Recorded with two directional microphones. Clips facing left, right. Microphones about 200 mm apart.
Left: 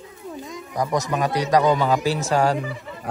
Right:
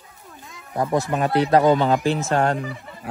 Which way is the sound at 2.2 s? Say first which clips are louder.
Left 1 dB; centre (ahead or behind).